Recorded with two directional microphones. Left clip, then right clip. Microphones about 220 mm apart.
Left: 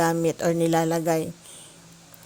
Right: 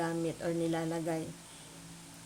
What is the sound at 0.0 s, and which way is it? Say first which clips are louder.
A woman's voice: left 12 dB; 35° left (ahead or behind).